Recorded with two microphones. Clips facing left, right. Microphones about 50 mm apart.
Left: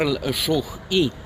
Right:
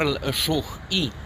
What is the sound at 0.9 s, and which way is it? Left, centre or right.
Speech, left.